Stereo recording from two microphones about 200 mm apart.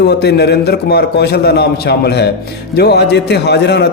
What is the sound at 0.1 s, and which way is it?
Speech, 55° left (ahead or behind).